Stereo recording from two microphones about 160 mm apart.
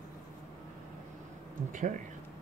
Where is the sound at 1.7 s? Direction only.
55° right (ahead or behind).